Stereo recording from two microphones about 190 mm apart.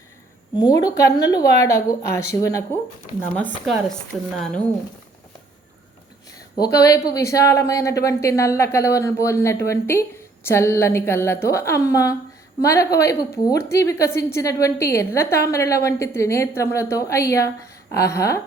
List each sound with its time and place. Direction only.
0.5 s a woman's voice: 20° left (ahead or behind)
4.4 s speech: 5° left (ahead or behind)
6.7 s a woman's voice: 20° left (ahead or behind)